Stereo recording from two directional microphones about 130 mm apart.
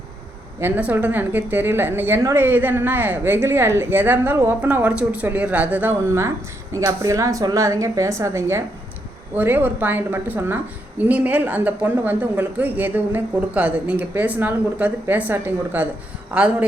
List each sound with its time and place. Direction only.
0.6 s a woman's voice: 15° right (ahead or behind)